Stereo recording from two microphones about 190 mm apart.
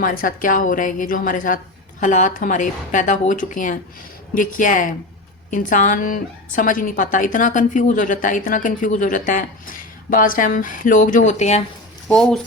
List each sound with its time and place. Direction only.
0.0 s a woman's voice: 50° left (ahead or behind)